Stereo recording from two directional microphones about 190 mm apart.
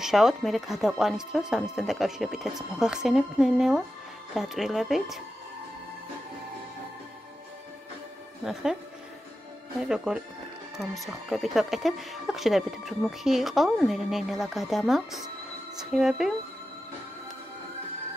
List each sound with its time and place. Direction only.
0.0 s speech: centre (ahead or behind)
9.8 s speech: 5° right (ahead or behind)